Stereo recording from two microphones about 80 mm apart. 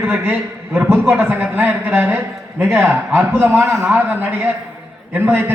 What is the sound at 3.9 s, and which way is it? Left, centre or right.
A man's voice, right.